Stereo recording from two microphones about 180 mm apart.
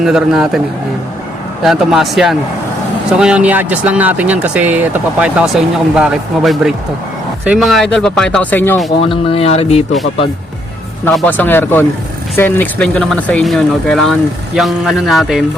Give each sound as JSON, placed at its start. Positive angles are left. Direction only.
{"t": 0.0, "sound": "speech", "side_deg": 0}
{"t": 1.6, "sound": "speech", "side_deg": 0}
{"t": 9.0, "sound": "speech", "side_deg": 30}
{"t": 11.1, "sound": "speech", "side_deg": 5}